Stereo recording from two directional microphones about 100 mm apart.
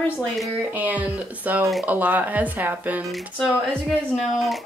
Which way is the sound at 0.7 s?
15° right (ahead or behind).